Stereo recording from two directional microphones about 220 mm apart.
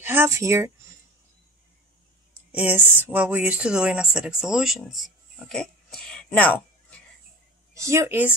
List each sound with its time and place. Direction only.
0.0 s speech: 10° right (ahead or behind)
2.5 s speech: 5° right (ahead or behind)
7.7 s speech: 15° right (ahead or behind)